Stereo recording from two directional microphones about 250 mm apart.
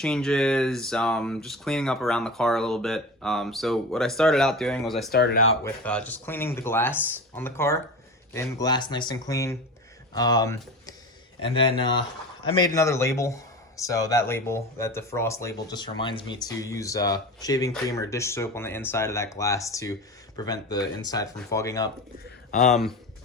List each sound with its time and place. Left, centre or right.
0.0 s speech: centre
5.1 s speech: left
5.6 s speech: centre
22.6 s speech: centre